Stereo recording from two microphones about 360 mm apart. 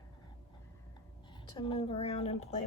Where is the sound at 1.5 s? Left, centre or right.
Centre.